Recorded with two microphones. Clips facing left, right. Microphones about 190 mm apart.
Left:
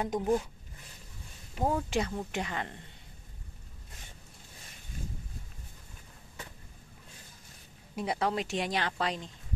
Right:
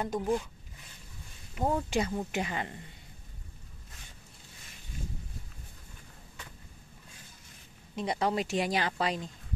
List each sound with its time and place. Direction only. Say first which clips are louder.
0.0 s speech: left 1 dB; 15° left (ahead or behind)
1.6 s a woman's voice: even; centre (ahead or behind)
7.9 s a woman's voice: right 1 dB; 5° left (ahead or behind)